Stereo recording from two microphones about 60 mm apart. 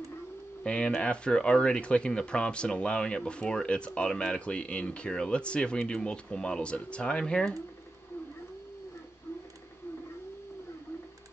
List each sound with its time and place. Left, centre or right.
0.7 s speech: centre